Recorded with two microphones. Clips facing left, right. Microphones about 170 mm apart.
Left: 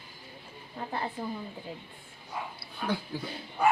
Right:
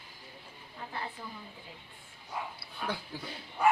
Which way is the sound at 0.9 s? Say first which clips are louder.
Left 7 dB; 45° left (ahead or behind).